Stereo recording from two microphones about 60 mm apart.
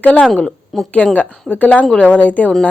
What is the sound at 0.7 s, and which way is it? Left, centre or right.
Speech, centre.